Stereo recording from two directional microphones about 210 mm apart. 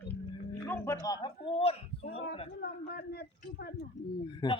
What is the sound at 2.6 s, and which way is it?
A man's voice, 50° left (ahead or behind).